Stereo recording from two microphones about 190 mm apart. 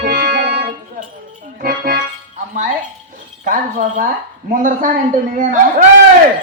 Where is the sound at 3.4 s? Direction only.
45° right (ahead or behind).